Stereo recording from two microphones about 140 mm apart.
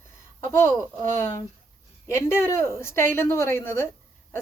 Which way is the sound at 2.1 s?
15° left (ahead or behind).